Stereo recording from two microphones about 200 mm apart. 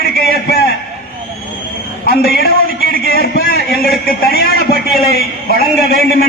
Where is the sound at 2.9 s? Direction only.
50° left (ahead or behind).